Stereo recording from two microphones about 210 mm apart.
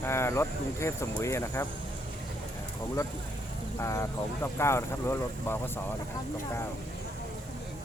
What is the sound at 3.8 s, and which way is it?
Speech, 15° left (ahead or behind).